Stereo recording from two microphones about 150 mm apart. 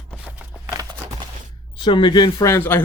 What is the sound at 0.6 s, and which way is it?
Clip-clop, 25° right (ahead or behind).